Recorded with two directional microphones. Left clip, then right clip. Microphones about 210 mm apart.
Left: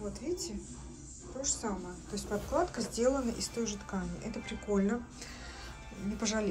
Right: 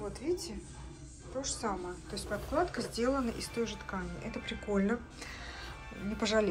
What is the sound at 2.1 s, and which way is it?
A woman's voice, 20° left (ahead or behind).